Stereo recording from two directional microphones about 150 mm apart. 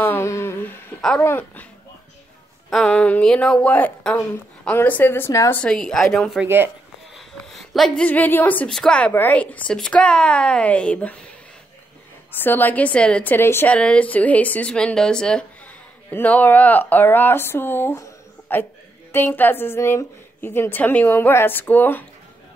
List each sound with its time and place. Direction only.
0.0 s humming: 15° left (ahead or behind)
1.2 s a woman's voice: 10° left (ahead or behind)
2.7 s a woman's voice: 5° left (ahead or behind)
5.6 s a woman's voice: 5° left (ahead or behind)
6.4 s speech: 15° right (ahead or behind)
7.2 s a woman's voice: centre (ahead or behind)
12.3 s a woman's voice: 15° left (ahead or behind)